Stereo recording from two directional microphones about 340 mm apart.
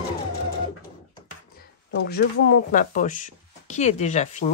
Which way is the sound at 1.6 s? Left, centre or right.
Left.